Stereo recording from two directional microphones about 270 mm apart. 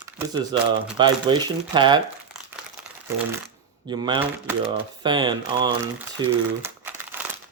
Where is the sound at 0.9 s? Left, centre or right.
Centre.